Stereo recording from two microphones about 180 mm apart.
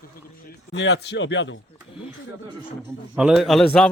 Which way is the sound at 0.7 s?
75° left (ahead or behind).